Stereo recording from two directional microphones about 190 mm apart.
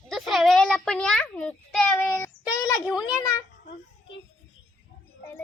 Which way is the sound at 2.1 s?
15° left (ahead or behind).